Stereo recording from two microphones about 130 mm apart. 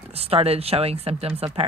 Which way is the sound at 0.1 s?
50° right (ahead or behind).